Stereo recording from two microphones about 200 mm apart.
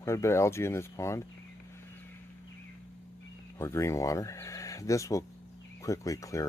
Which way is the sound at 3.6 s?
15° left (ahead or behind).